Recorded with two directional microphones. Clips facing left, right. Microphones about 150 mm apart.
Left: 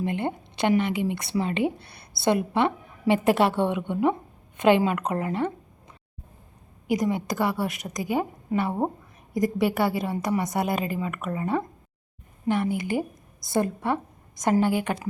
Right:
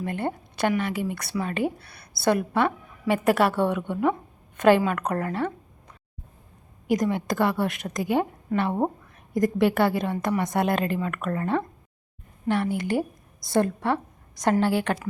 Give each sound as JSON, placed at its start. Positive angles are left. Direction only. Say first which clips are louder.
{"t": 0.0, "sound": "speech", "louder": "left 1 dB", "side_deg": 20}
{"t": 7.1, "sound": "a woman's voice", "louder": "right 2 dB", "side_deg": 5}